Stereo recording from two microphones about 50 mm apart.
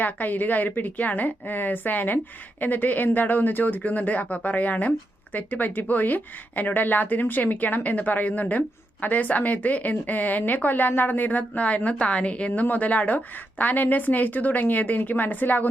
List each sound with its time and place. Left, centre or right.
0.0 s speech: left